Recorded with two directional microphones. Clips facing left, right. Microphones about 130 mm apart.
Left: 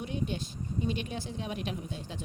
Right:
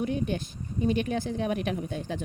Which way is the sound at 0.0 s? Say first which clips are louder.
Right 6 dB; 50° right (ahead or behind).